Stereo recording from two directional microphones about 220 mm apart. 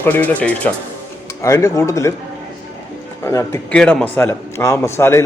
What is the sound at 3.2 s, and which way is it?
A man's voice, 15° left (ahead or behind).